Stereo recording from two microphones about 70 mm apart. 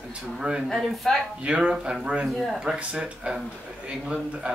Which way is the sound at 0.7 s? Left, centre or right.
Centre.